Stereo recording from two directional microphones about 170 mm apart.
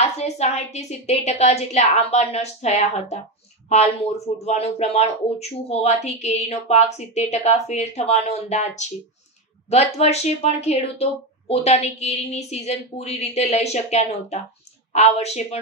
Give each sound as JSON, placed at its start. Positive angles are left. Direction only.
{"t": 0.0, "sound": "speech", "side_deg": 40}